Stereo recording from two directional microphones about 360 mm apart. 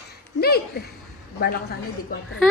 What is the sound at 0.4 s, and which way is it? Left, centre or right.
Speech, left.